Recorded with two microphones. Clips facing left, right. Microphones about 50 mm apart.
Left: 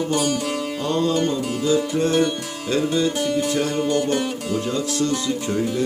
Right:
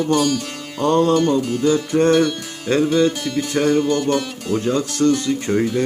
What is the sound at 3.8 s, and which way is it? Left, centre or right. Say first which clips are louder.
Music: right 2 dB; left.